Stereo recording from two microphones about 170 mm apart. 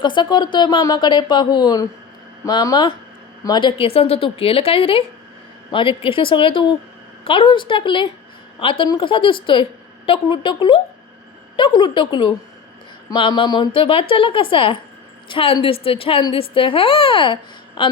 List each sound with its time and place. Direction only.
0.0 s a woman's voice: 25° left (ahead or behind)